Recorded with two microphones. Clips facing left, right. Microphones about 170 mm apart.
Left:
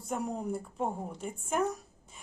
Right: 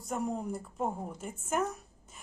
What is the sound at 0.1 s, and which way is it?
A woman's voice, centre (ahead or behind).